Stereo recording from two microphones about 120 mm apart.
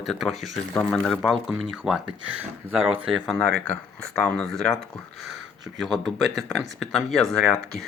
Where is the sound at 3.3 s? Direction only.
10° left (ahead or behind).